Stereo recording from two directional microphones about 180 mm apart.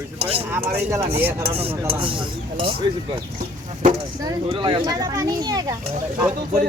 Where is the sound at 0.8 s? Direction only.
15° right (ahead or behind).